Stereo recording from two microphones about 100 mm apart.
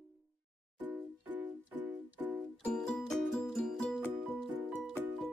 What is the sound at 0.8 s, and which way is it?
Music, 20° right (ahead or behind).